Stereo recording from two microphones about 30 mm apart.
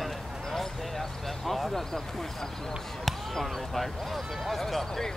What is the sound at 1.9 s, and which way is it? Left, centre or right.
Speech, centre.